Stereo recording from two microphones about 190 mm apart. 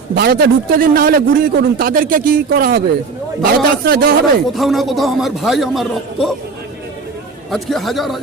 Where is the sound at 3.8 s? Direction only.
55° right (ahead or behind).